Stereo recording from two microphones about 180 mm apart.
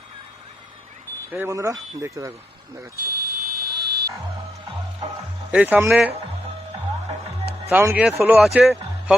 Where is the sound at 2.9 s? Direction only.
55° right (ahead or behind).